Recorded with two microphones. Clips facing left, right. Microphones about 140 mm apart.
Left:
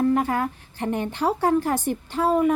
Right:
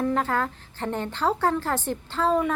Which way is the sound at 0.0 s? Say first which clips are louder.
Left 3 dB; 10° left (ahead or behind).